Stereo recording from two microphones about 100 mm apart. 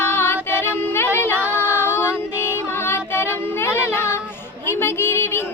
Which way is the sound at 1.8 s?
25° left (ahead or behind).